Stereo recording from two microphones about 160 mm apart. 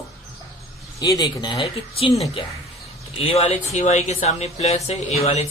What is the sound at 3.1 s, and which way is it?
Speech, 40° left (ahead or behind).